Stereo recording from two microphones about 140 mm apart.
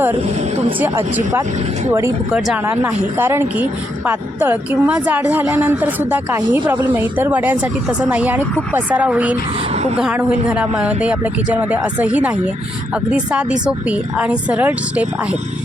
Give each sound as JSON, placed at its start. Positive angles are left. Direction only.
{"t": 0.8, "sound": "speech", "side_deg": -15}
{"t": 2.3, "sound": "a woman's voice", "side_deg": -10}